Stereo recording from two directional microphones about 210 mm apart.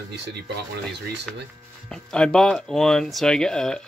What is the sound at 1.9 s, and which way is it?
Speech, 5° left (ahead or behind).